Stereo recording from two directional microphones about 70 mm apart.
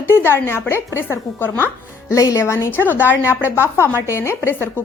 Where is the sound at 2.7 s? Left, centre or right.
Left.